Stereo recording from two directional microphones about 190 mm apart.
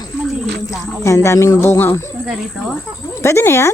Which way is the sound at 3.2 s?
15° left (ahead or behind).